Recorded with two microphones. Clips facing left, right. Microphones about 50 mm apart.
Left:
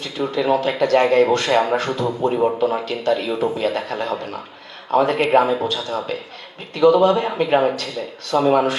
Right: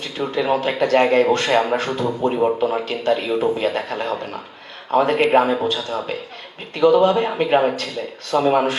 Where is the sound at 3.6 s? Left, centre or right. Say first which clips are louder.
Even; right.